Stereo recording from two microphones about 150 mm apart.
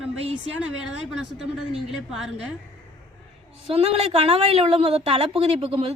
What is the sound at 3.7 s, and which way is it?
A woman's voice, 45° right (ahead or behind).